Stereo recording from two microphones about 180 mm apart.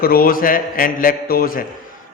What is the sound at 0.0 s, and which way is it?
A man's voice, 55° left (ahead or behind).